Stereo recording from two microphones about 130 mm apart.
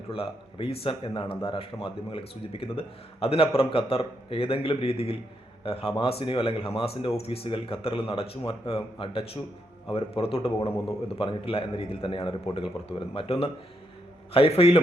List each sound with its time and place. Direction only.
0.1 s a man's voice: 45° left (ahead or behind)